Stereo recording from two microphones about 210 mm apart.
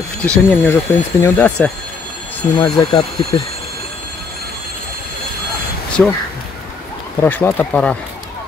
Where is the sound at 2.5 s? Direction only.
20° left (ahead or behind).